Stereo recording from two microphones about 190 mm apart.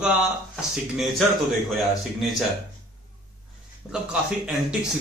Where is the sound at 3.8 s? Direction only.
5° right (ahead or behind).